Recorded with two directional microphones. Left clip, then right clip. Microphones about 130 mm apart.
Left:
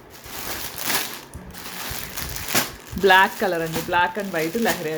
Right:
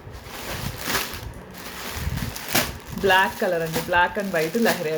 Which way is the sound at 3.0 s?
40° left (ahead or behind).